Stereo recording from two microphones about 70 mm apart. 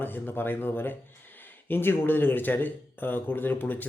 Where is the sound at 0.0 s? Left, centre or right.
Left.